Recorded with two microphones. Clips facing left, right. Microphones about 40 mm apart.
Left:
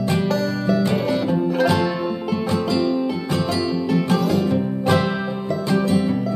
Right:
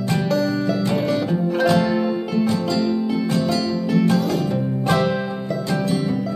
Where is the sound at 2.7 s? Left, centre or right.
Left.